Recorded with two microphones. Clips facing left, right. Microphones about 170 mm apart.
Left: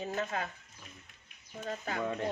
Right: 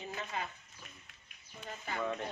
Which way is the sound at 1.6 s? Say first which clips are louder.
Left 3 dB; 45° left (ahead or behind).